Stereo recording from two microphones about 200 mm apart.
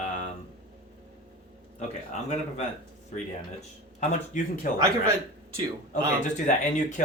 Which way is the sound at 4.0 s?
40° left (ahead or behind).